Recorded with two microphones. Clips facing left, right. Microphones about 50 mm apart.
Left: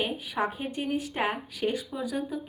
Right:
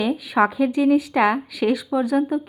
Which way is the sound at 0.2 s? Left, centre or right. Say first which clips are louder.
Right 12 dB; right.